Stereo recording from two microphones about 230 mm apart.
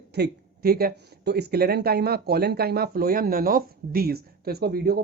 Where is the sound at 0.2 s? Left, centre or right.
Right.